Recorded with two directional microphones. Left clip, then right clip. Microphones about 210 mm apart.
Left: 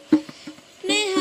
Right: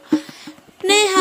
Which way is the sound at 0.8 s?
55° right (ahead or behind).